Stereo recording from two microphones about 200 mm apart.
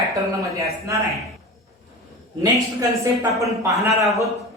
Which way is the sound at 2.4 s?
15° right (ahead or behind).